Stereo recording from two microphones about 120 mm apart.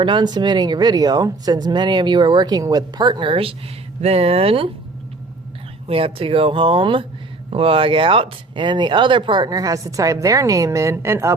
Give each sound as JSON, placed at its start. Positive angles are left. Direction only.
{"t": 0.0, "sound": "speech", "side_deg": -40}
{"t": 4.0, "sound": "speech", "side_deg": -60}
{"t": 5.9, "sound": "speech", "side_deg": -50}